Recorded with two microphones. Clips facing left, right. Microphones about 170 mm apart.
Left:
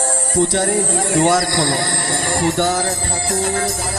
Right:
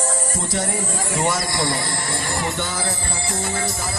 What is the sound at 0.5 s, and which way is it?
Speech, 60° left (ahead or behind).